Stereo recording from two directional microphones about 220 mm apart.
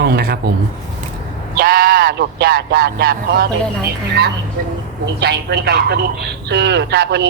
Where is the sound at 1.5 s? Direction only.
45° right (ahead or behind).